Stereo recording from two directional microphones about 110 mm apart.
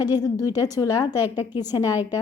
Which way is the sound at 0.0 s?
35° left (ahead or behind).